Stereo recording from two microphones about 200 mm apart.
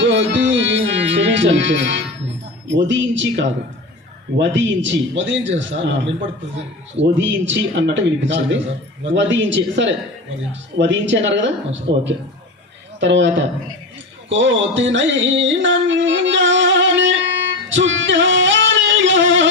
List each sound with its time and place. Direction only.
0.0 s music: 65° right (ahead or behind)
2.6 s a man's voice: 65° right (ahead or behind)
7.0 s a man's voice: 65° right (ahead or behind)
14.3 s a sound: 65° right (ahead or behind)
17.7 s singing: 70° right (ahead or behind)